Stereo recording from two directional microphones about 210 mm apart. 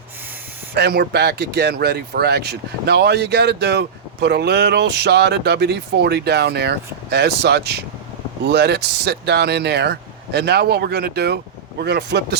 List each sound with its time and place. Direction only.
0.7 s speech: 50° right (ahead or behind)